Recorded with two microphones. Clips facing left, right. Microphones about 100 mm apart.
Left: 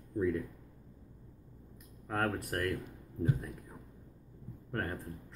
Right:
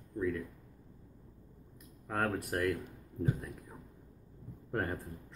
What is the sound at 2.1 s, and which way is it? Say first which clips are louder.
Speech: even; 5° right (ahead or behind).